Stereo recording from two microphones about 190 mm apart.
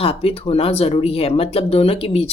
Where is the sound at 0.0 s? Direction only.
30° left (ahead or behind).